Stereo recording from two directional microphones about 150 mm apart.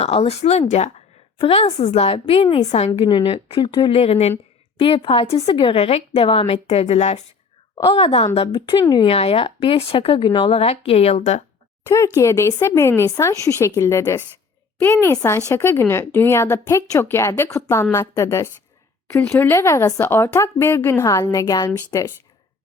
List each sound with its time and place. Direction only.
0.0 s a woman's voice: 40° left (ahead or behind)
8.8 s a woman's voice: 30° left (ahead or behind)
9.0 s a woman's voice: 40° left (ahead or behind)
11.9 s a woman's voice: 20° left (ahead or behind)